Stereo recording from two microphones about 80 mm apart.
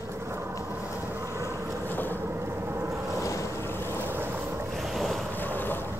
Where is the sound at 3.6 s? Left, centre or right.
Left.